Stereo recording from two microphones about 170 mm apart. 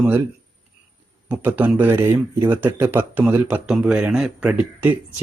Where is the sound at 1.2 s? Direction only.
10° right (ahead or behind).